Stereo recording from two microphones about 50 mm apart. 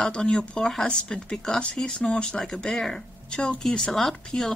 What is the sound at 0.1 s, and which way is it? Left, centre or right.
Speech, centre.